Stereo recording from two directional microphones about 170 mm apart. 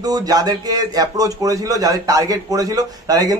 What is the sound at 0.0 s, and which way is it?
A man's voice, 20° right (ahead or behind).